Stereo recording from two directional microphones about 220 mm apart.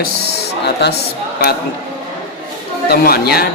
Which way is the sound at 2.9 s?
45° left (ahead or behind).